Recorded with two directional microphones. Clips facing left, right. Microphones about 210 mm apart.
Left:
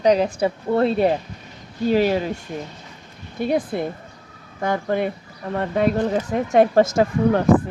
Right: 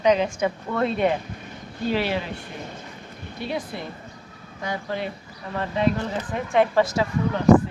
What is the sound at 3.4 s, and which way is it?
Speech, 50° left (ahead or behind).